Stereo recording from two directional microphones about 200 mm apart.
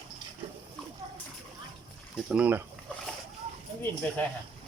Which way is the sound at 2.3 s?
5° right (ahead or behind).